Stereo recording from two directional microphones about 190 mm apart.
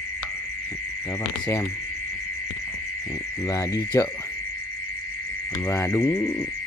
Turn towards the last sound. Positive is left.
turn(degrees=15)  # may be behind; listen again after turning